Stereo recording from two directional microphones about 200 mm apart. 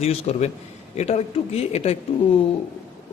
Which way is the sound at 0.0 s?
30° left (ahead or behind).